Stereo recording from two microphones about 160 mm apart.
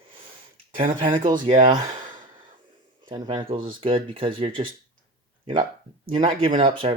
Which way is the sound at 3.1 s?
30° right (ahead or behind).